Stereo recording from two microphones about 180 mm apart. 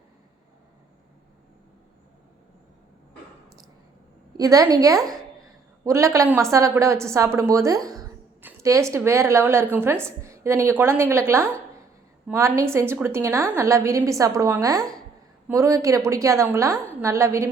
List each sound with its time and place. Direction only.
4.4 s a woman's voice: 20° right (ahead or behind)